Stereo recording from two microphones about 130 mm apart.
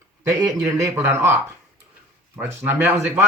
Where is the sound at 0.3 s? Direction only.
25° right (ahead or behind).